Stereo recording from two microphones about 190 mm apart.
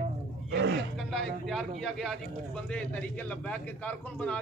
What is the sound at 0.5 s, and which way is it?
Speech, 65° right (ahead or behind).